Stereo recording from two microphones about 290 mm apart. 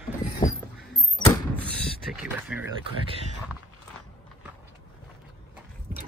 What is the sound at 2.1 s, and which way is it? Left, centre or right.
Speech, centre.